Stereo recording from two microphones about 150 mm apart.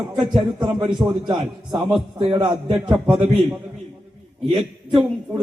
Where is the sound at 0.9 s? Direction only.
25° right (ahead or behind).